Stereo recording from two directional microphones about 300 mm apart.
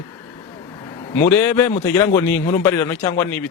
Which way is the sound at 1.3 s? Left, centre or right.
Centre.